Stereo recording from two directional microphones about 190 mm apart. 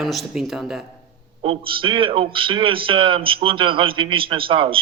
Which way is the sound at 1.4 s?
25° right (ahead or behind).